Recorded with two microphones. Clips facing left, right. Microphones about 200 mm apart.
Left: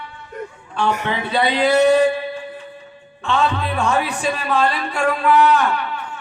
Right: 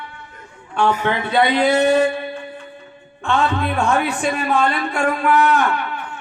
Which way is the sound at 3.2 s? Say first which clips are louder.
Right 1 dB; 55° right (ahead or behind).